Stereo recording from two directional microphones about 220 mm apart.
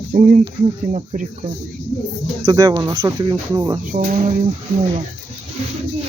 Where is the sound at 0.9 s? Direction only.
35° right (ahead or behind).